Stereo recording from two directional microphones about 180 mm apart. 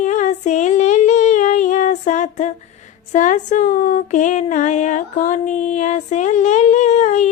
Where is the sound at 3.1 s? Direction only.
45° left (ahead or behind).